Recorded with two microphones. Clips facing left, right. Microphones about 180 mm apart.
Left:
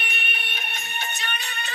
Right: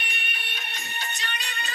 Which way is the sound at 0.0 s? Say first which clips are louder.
Left 4 dB; 60° left (ahead or behind).